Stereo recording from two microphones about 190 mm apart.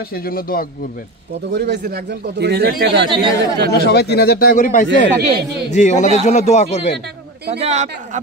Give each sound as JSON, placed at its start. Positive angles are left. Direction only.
{"t": 0.1, "sound": "speech", "side_deg": 50}
{"t": 1.5, "sound": "speech", "side_deg": -60}
{"t": 3.7, "sound": "speech", "side_deg": 60}
{"t": 4.8, "sound": "speech", "side_deg": -65}
{"t": 5.7, "sound": "a man's voice", "side_deg": 40}
{"t": 7.6, "sound": "a man's voice", "side_deg": -35}